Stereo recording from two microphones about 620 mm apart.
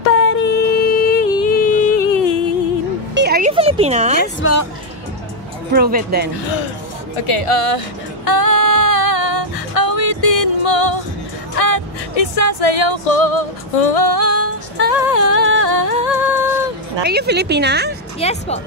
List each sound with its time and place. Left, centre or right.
0.1 s music: centre
3.2 s a sound: centre
4.2 s speech: centre
5.7 s speech: centre
7.2 s speech: left
8.3 s female singing: left
11.5 s music: left
17.0 s speech: centre
18.2 s speech: centre